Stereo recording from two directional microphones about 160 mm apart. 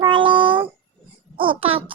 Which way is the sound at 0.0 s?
30° right (ahead or behind).